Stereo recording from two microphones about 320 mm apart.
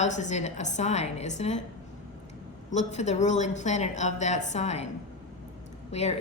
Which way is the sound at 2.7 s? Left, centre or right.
Left.